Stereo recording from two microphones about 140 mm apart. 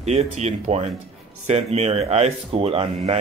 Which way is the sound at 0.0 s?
50° right (ahead or behind).